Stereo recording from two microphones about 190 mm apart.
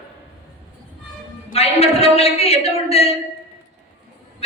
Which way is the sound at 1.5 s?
30° left (ahead or behind).